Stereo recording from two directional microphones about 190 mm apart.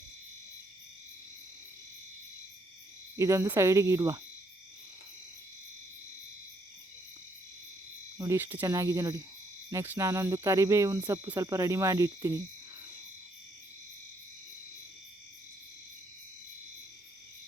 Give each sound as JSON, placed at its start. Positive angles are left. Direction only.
{"t": 3.2, "sound": "speech", "side_deg": -15}
{"t": 8.2, "sound": "speech", "side_deg": -10}